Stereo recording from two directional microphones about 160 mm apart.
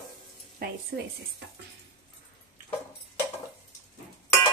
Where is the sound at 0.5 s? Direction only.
80° right.